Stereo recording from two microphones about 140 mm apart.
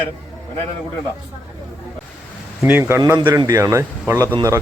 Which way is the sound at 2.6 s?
15° right (ahead or behind).